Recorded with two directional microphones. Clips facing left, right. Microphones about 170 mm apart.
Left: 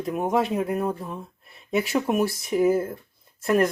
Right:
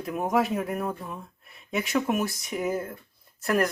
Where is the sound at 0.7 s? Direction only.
25° left (ahead or behind).